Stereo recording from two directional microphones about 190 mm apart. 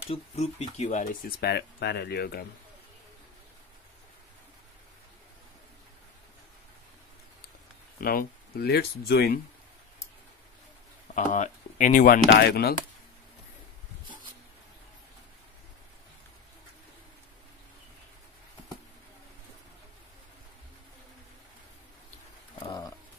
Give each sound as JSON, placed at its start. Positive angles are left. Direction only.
{"t": 0.1, "sound": "speech", "side_deg": 35}
{"t": 8.0, "sound": "speech", "side_deg": 50}
{"t": 11.1, "sound": "speech", "side_deg": 40}
{"t": 12.4, "sound": "speech", "side_deg": 55}
{"t": 22.7, "sound": "a sound", "side_deg": 20}